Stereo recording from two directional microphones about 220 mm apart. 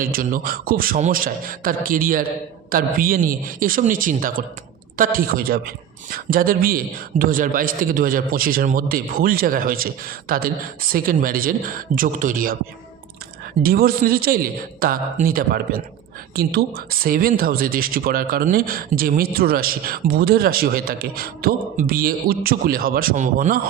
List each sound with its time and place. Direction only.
0.0 s a man's voice: 40° right (ahead or behind)
13.6 s a man's voice: 40° right (ahead or behind)